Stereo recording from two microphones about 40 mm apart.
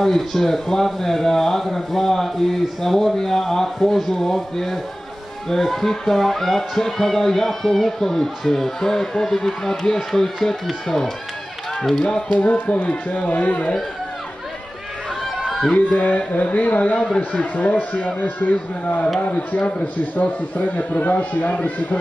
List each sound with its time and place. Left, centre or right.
0.0 s speech: centre
12.0 s speech: left
12.3 s a man's voice: left
15.4 s a sound: centre
16.0 s a man's voice: left
16.9 s speech: centre
17.6 s a man's voice: left
19.2 s a man's voice: left